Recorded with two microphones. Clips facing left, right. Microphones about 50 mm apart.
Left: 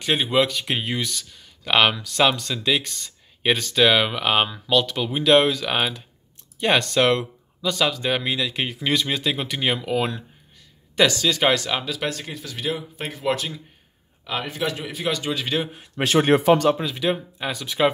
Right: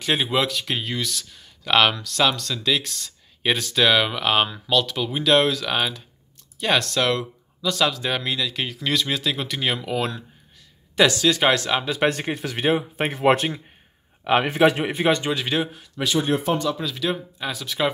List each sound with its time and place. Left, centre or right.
0.0 s speech: centre
0.7 s speech: centre
1.1 s speech: centre
7.0 s a sound: left
7.7 s speech: centre
11.1 s speech: centre
12.0 s speech: right
14.9 s a man's voice: right
15.2 s speech: centre
16.0 s speech: left
16.3 s speech: left
16.7 s speech: centre
17.5 s speech: centre